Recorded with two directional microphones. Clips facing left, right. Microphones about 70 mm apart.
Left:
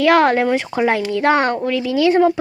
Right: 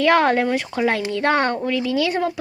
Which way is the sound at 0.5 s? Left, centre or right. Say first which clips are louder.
Left 3 dB; centre.